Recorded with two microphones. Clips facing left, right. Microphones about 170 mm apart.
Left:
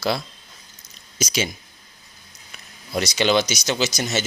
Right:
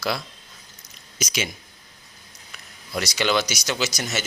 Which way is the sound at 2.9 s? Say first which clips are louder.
Left 3 dB; 20° left (ahead or behind).